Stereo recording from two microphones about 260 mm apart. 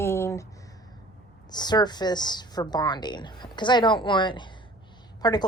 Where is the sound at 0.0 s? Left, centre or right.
Centre.